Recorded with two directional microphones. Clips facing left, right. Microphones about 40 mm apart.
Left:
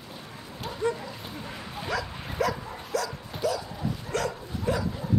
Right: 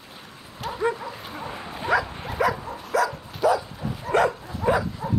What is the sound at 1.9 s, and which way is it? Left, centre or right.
Dog, centre.